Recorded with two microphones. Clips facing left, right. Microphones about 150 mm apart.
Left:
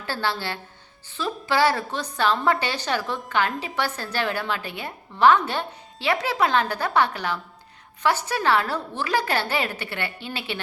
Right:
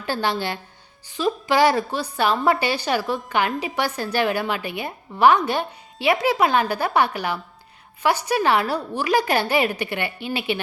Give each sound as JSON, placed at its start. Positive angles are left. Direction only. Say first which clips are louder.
{"t": 0.0, "sound": "a woman's voice", "louder": "right 4 dB", "side_deg": -15}